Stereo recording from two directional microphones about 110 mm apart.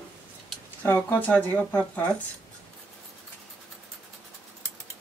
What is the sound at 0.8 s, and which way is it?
Speech, 15° left (ahead or behind).